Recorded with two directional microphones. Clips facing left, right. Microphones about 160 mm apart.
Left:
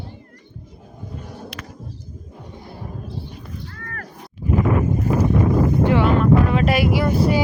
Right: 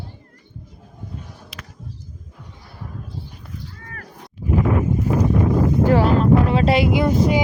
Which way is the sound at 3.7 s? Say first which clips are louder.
Left 4 dB; 60° left (ahead or behind).